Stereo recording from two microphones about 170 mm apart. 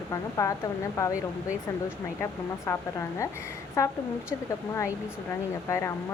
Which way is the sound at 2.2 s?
15° left (ahead or behind).